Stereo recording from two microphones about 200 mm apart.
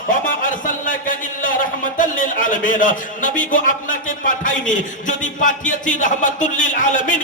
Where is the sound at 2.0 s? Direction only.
40° left (ahead or behind).